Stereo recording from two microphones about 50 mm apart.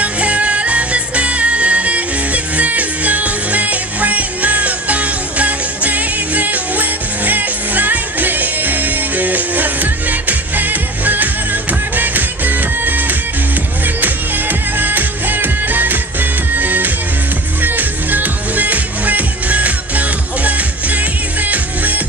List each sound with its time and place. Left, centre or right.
0.0 s music: right